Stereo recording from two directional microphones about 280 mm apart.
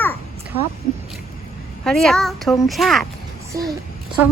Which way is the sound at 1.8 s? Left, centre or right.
Centre.